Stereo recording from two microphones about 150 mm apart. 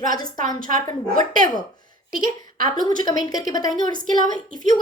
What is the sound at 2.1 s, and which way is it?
Speech, 70° right (ahead or behind).